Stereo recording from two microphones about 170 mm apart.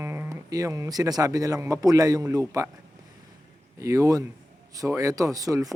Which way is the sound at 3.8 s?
20° right (ahead or behind).